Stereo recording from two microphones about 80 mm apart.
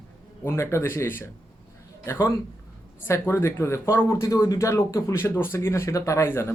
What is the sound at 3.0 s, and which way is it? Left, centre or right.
Speech, left.